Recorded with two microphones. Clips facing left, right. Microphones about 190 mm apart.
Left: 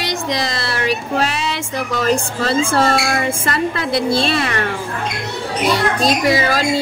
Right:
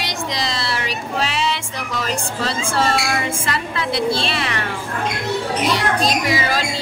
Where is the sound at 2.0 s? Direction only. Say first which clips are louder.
Left 6 dB; 45° left (ahead or behind).